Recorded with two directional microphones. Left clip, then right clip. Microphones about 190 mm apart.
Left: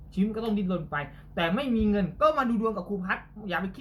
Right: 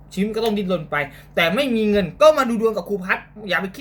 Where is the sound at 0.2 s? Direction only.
15° right (ahead or behind).